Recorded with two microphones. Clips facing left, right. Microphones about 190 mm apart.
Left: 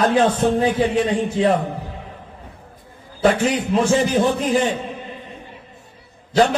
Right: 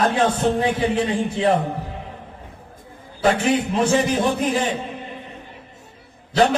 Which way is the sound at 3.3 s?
25° right (ahead or behind).